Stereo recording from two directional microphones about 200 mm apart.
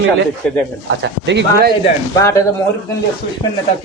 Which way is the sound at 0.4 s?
5° left (ahead or behind).